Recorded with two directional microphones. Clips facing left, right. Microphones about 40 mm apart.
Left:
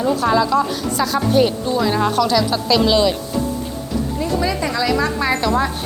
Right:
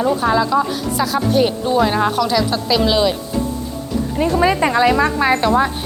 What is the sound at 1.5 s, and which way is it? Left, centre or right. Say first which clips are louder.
A woman's voice: right 3 dB; right.